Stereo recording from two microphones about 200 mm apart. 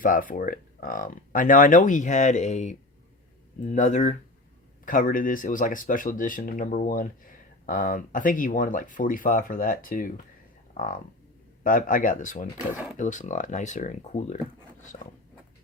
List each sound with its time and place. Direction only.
0.0 s speech: 45° left (ahead or behind)
12.7 s speech: 5° right (ahead or behind)
13.0 s speech: 40° left (ahead or behind)